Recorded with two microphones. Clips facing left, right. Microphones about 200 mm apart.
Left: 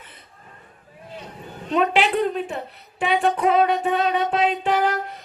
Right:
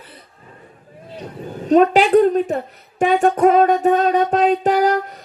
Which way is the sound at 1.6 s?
40° right (ahead or behind).